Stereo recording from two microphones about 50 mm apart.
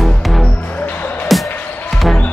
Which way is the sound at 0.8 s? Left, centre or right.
Left.